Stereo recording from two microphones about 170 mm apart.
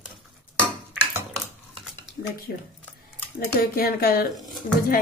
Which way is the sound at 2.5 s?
60° left (ahead or behind).